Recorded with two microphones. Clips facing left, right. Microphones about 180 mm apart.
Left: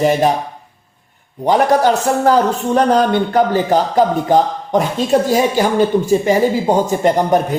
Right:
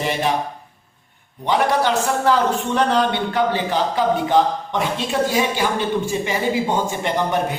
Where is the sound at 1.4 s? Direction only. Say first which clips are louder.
Left 6 dB; 40° left (ahead or behind).